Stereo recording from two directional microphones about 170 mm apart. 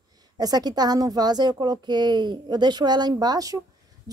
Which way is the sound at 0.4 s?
20° right (ahead or behind).